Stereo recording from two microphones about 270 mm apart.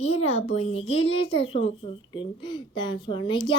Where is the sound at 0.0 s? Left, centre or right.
Left.